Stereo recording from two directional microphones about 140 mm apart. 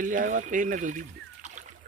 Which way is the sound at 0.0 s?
70° right (ahead or behind).